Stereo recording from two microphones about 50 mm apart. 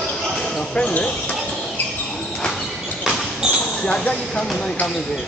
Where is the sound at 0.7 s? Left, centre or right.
Centre.